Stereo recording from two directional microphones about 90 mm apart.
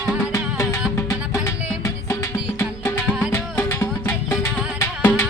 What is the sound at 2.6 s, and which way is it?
Music, 30° left (ahead or behind).